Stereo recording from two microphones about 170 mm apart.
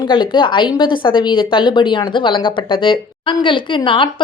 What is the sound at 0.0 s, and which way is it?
A woman's voice, 30° left (ahead or behind).